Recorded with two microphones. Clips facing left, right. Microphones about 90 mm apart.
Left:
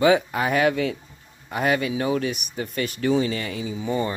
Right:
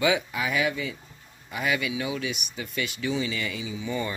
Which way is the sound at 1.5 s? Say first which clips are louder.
Left 5 dB; 45° left (ahead or behind).